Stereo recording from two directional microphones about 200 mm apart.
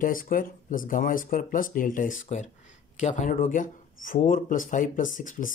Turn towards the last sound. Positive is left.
turn(degrees=40)  # may be behind; listen again after turning